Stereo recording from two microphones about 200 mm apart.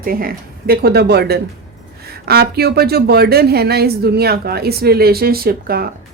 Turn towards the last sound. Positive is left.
turn(degrees=-50)  # may be behind; listen again after turning